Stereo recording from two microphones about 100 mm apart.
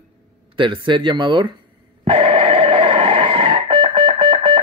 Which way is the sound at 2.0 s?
65° right (ahead or behind).